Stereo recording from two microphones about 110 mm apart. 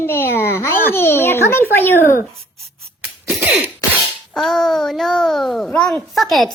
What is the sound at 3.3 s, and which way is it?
Cough, 15° right (ahead or behind).